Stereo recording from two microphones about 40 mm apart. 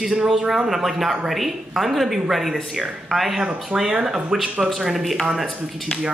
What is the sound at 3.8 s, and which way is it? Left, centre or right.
Speech, centre.